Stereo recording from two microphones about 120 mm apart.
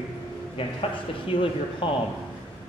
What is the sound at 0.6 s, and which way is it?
Speech, 50° left (ahead or behind).